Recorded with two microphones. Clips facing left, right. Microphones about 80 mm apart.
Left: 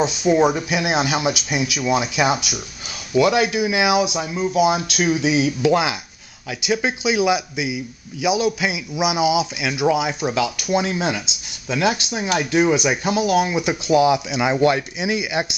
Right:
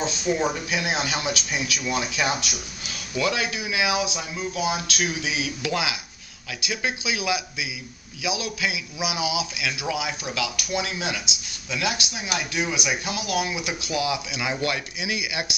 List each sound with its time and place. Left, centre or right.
0.0 s a man's voice: centre